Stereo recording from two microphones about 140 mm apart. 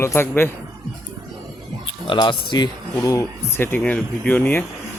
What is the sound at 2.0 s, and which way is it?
Speech, 35° left (ahead or behind).